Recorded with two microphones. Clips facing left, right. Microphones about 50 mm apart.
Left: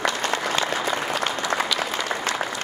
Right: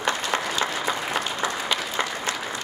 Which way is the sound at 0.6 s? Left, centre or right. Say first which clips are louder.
Left 2 dB; left.